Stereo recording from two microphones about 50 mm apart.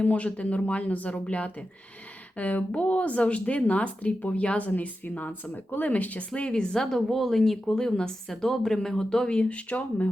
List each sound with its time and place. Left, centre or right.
0.0 s a woman's voice: left